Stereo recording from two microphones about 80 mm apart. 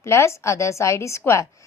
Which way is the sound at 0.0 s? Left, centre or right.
Left.